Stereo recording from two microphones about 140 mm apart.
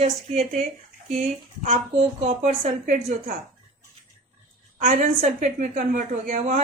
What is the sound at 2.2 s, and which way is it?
A woman's voice, 55° right (ahead or behind).